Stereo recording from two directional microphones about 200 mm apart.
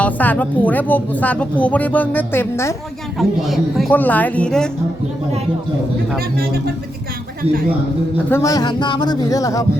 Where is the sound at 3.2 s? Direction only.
Centre (ahead or behind).